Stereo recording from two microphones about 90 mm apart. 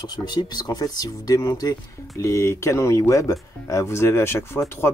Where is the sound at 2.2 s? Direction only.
30° left (ahead or behind).